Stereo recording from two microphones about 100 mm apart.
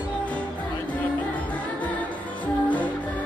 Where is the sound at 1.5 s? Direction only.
15° left (ahead or behind).